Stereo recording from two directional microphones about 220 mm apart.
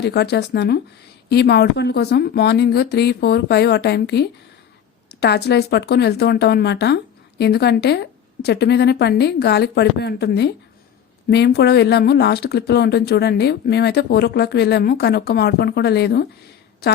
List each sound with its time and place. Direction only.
0.0 s speech: 50° left (ahead or behind)